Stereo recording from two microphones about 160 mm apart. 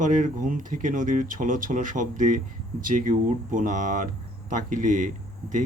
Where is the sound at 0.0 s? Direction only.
55° right (ahead or behind).